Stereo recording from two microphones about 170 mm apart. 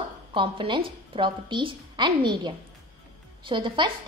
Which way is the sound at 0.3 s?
30° right (ahead or behind).